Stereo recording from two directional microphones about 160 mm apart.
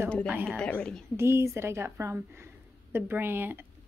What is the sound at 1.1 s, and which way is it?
A woman's voice, 15° right (ahead or behind).